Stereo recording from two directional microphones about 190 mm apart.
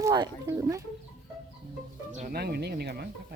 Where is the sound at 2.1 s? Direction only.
50° right (ahead or behind).